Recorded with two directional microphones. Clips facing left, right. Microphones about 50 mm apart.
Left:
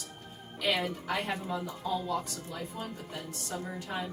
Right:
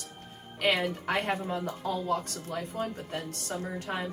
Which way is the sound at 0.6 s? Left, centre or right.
Right.